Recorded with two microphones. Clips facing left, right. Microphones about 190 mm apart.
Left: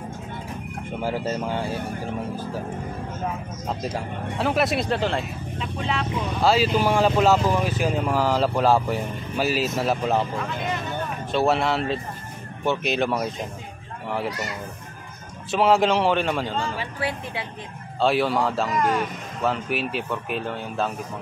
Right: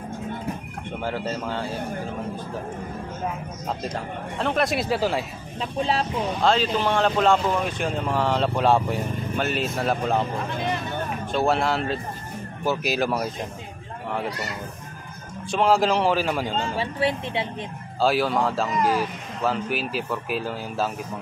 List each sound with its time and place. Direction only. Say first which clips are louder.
1.0 s speech: left 2 dB; 10° left (ahead or behind)
3.6 s speech: left 1 dB; 5° left (ahead or behind)
5.6 s speech: right 4 dB; 35° right (ahead or behind)
6.4 s speech: left 2 dB; 5° left (ahead or behind)
11.3 s speech: left 1 dB; centre (ahead or behind)
15.5 s speech: left 1 dB; centre (ahead or behind)
16.4 s speech: right 2 dB; 20° right (ahead or behind)
18.0 s speech: even; centre (ahead or behind)